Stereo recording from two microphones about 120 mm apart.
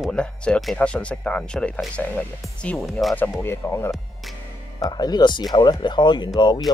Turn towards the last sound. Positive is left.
turn(degrees=40)  # may be behind; listen again after turning